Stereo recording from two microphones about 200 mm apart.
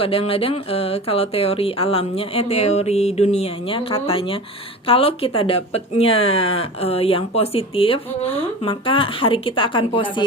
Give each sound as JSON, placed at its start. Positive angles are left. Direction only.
{"t": 0.0, "sound": "speech", "side_deg": 30}